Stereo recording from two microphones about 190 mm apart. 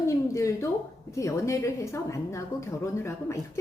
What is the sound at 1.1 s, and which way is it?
Speech, 15° left (ahead or behind).